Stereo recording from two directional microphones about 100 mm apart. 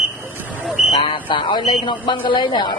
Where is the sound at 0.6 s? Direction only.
Centre (ahead or behind).